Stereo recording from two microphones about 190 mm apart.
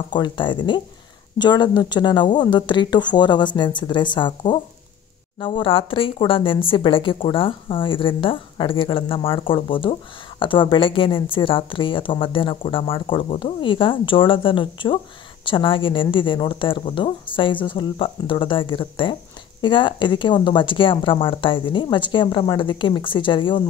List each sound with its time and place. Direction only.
0.1 s a woman's voice: 25° left (ahead or behind)